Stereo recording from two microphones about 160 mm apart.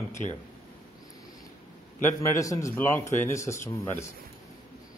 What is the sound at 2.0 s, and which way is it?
Speech, 20° left (ahead or behind).